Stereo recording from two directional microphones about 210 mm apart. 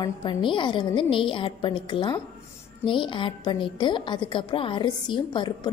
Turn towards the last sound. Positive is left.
turn(degrees=20)  # may be behind; listen again after turning